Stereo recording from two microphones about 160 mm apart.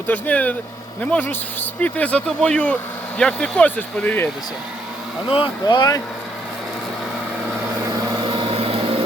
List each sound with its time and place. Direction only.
0.1 s speech: 10° left (ahead or behind)
5.3 s speech: 30° left (ahead or behind)
8.3 s vehicle: 30° right (ahead or behind)